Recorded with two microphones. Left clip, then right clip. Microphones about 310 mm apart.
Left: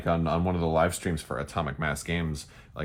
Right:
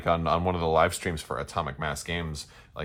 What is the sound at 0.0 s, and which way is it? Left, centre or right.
Speech, centre.